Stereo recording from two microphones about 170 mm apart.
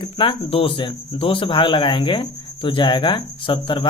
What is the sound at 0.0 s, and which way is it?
Speech, 30° left (ahead or behind).